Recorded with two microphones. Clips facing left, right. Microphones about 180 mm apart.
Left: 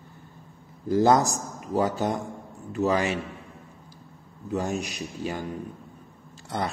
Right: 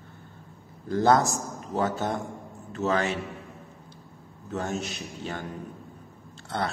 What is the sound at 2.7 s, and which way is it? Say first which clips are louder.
Speech: left 2 dB; 15° left (ahead or behind).